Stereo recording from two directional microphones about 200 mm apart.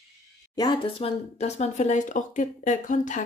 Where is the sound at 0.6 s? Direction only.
25° left (ahead or behind).